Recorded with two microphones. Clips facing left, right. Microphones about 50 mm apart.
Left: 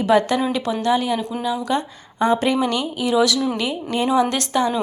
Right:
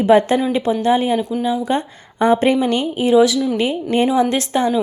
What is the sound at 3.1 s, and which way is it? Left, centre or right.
Speech, centre.